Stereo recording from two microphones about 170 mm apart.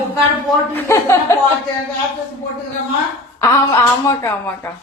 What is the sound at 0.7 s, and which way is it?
Speech, 15° left (ahead or behind).